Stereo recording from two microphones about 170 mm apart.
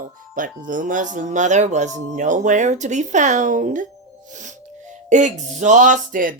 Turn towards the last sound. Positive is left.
turn(degrees=-55)  # may be behind; listen again after turning